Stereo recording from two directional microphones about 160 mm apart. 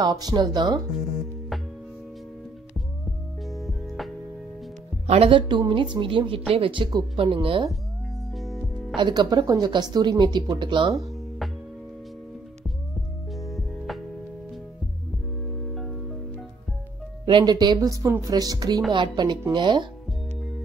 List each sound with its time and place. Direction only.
0.0 s speech: 25° right (ahead or behind)
3.4 s music: centre (ahead or behind)
5.0 s a woman's voice: 40° right (ahead or behind)
8.4 s music: centre (ahead or behind)
8.9 s speech: 30° right (ahead or behind)
13.3 s music: centre (ahead or behind)
15.7 s music: centre (ahead or behind)
17.3 s speech: 30° right (ahead or behind)